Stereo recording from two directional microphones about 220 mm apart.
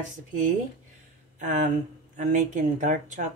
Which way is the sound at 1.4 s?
35° right (ahead or behind).